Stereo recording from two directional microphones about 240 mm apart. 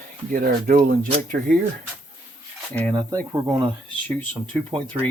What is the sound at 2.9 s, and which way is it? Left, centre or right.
Speech, centre.